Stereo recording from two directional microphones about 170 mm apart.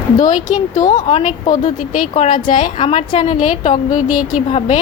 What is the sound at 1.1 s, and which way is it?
Speech, 35° left (ahead or behind).